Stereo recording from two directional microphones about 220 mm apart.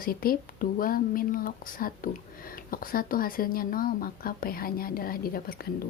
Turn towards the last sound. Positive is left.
turn(degrees=40)  # may be behind; listen again after turning